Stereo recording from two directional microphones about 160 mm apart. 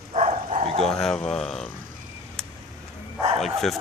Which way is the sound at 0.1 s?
45° right (ahead or behind).